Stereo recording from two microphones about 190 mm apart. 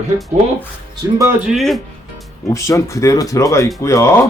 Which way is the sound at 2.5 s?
15° left (ahead or behind).